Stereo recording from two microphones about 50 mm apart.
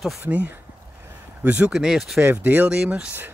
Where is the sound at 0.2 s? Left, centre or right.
Right.